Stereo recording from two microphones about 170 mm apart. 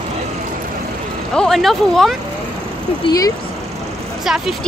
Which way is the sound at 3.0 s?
20° left (ahead or behind).